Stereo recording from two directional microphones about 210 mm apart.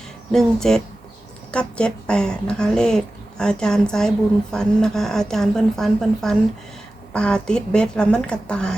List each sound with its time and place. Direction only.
0.3 s speech: centre (ahead or behind)